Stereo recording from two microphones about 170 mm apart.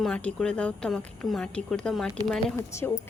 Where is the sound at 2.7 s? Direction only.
15° left (ahead or behind).